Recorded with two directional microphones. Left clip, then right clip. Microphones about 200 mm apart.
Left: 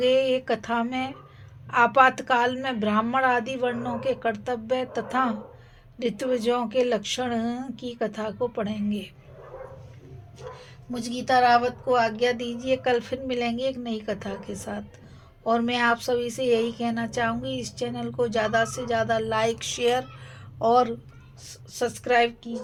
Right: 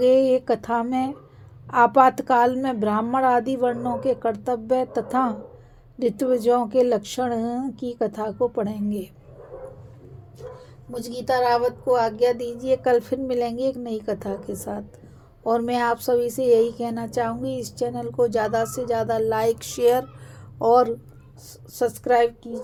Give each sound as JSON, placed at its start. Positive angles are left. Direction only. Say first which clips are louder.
{"t": 0.0, "sound": "a woman's voice", "louder": "right 4 dB", "side_deg": -50}
{"t": 11.0, "sound": "a woman's voice", "louder": "left 1 dB", "side_deg": -55}